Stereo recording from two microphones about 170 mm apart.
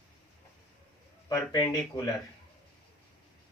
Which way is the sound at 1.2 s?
20° left (ahead or behind).